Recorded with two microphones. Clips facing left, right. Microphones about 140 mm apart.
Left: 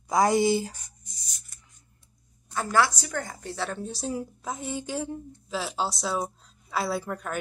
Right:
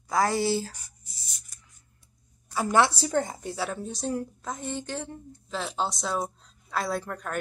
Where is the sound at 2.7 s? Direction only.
25° right (ahead or behind).